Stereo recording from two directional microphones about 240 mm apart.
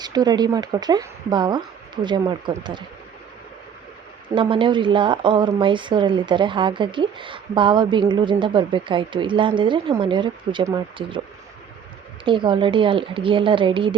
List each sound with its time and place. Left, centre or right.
0.0 s speech: centre
4.4 s a woman's voice: right
12.2 s a woman's voice: right